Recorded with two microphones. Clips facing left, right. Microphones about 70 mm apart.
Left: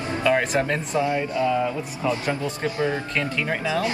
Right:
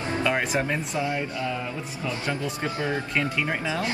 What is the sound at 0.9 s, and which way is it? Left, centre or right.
Speech, left.